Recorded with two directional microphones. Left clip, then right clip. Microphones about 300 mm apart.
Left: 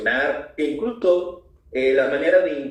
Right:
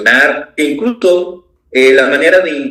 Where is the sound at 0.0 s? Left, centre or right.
Right.